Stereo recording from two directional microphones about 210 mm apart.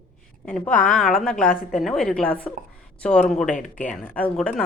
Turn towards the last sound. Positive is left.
turn(degrees=5)  # may be behind; listen again after turning